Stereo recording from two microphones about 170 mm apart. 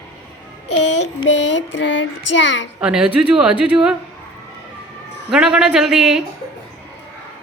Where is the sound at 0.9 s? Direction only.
90° left.